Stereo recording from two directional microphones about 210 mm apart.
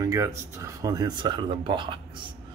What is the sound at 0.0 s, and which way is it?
Speech, 15° right (ahead or behind).